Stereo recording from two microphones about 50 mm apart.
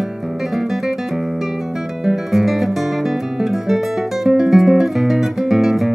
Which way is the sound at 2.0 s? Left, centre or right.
Centre.